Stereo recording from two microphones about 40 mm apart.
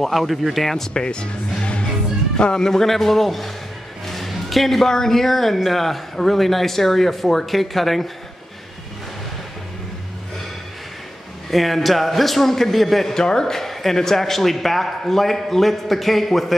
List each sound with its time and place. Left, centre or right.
0.0 s a man's voice: centre
0.9 s a man's voice: left; by 8.1 s centre
11.5 s a man's voice: centre